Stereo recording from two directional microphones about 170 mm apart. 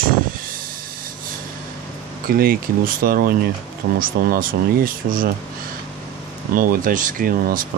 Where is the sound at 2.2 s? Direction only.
60° right (ahead or behind).